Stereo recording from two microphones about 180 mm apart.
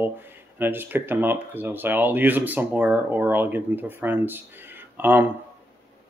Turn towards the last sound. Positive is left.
turn(degrees=-10)  # may be behind; listen again after turning